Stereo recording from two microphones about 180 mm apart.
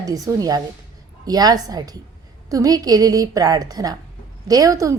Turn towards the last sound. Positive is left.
turn(degrees=-20)  # may be behind; listen again after turning